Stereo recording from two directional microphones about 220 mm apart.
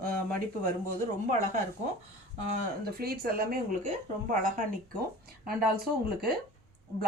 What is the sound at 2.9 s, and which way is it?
Speech, 45° right (ahead or behind).